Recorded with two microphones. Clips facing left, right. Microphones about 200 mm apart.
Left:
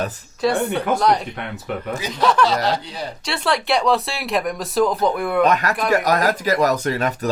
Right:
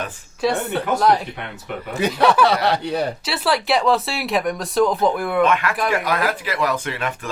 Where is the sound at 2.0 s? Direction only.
60° right (ahead or behind).